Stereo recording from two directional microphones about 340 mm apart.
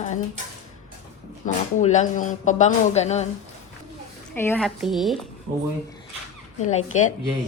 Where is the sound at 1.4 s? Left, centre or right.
Centre.